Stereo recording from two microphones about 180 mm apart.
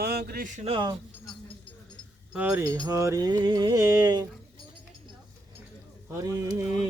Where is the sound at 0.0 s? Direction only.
60° right (ahead or behind).